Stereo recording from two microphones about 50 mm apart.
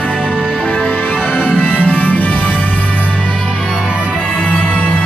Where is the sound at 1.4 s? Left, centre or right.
Left.